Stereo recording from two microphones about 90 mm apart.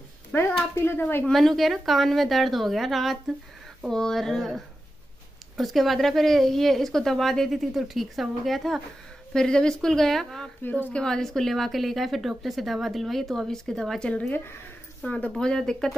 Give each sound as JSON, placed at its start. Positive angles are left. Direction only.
{"t": 0.3, "sound": "a woman's voice", "side_deg": 25}
{"t": 1.2, "sound": "a woman's voice", "side_deg": 5}
{"t": 10.6, "sound": "a woman's voice", "side_deg": 20}